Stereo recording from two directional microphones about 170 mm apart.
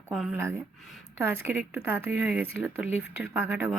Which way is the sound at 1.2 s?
10° right (ahead or behind).